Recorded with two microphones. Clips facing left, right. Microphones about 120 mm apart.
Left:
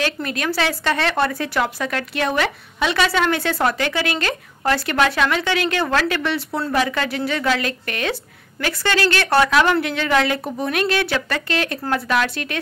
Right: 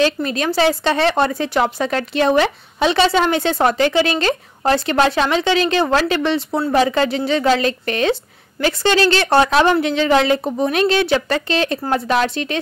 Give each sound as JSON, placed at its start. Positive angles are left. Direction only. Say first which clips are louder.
{"t": 0.0, "sound": "speech", "louder": "right 6 dB", "side_deg": -25}